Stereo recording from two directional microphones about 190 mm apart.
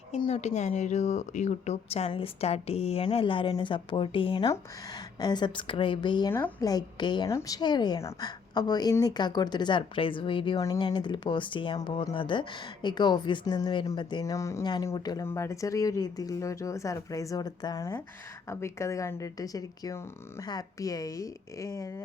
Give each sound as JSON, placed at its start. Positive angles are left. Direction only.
{"t": 0.1, "sound": "a woman's voice", "side_deg": 30}